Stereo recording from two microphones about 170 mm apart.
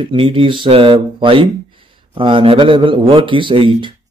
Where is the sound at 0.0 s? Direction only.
30° right (ahead or behind).